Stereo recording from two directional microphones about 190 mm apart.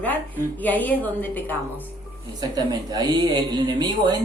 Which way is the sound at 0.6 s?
10° left (ahead or behind).